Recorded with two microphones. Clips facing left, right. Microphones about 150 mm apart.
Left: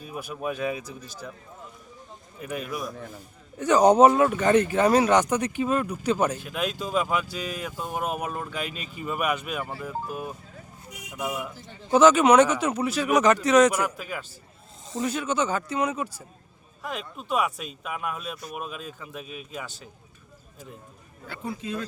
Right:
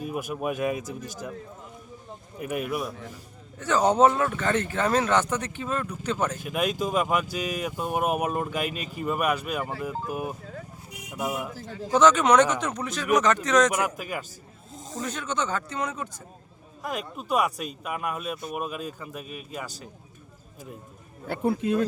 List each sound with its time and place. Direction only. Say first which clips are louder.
0.3 s speech: even; 10° right (ahead or behind)
0.8 s speech: right 4 dB; 45° right (ahead or behind)
2.4 s speech: right 3 dB; 5° right (ahead or behind)
3.6 s speech: left 4 dB; 15° left (ahead or behind)
6.4 s a man's voice: right 3 dB; 10° right (ahead or behind)
10.1 s speech: right 3 dB; 10° right (ahead or behind)
11.9 s speech: left 2 dB; 10° left (ahead or behind)
13.7 s speech: right 1 dB; 10° right (ahead or behind)
15.0 s speech: left 4 dB; 10° left (ahead or behind)
16.8 s a man's voice: right 2 dB; 5° right (ahead or behind)
21.2 s speech: right 8 dB; 60° right (ahead or behind)